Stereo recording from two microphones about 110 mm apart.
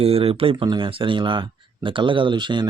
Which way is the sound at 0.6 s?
45° right (ahead or behind).